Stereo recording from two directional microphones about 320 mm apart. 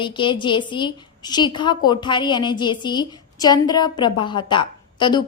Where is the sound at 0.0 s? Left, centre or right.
Centre.